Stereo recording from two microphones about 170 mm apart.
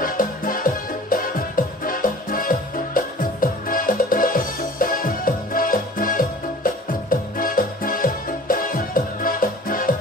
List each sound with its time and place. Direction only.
0.0 s music: 55° left (ahead or behind)